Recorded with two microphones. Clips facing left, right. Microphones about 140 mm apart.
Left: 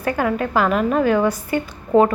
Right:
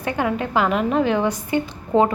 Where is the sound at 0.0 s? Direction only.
20° right (ahead or behind).